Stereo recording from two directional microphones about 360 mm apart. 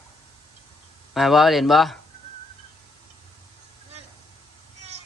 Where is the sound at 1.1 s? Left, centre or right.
Centre.